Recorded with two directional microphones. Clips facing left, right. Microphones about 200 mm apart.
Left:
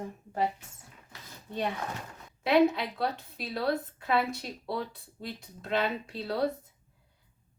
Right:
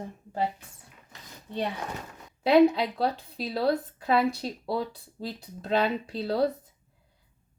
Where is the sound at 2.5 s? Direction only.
35° right (ahead or behind).